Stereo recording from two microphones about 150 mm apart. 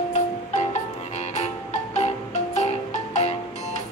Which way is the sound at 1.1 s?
50° left (ahead or behind).